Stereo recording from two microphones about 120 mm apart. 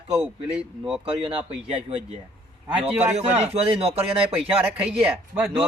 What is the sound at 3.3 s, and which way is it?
Speech, 60° right (ahead or behind).